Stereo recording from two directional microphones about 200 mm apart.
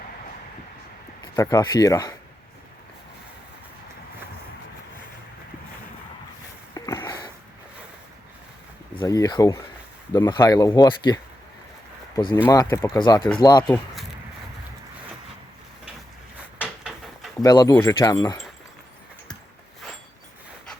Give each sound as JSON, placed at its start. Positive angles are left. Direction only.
{"t": 1.4, "sound": "speech", "side_deg": 20}
{"t": 6.7, "sound": "a sound", "side_deg": 15}
{"t": 9.0, "sound": "speech", "side_deg": 20}
{"t": 12.5, "sound": "speech", "side_deg": 15}
{"t": 16.6, "sound": "a sound", "side_deg": -5}
{"t": 17.4, "sound": "speech", "side_deg": 20}